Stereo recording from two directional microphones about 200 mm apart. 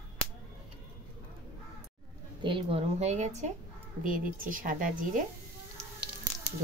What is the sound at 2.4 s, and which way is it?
A woman's voice, 25° right (ahead or behind).